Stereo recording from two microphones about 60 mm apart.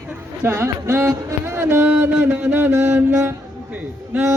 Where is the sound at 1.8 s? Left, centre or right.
Right.